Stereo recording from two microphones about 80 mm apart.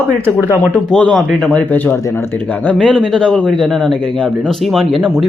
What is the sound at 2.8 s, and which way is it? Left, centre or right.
A man's voice, centre.